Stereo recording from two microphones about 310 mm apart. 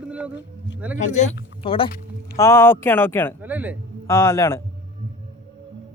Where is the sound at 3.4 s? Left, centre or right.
Centre.